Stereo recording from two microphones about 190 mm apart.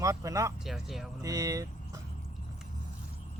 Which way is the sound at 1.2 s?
20° right (ahead or behind).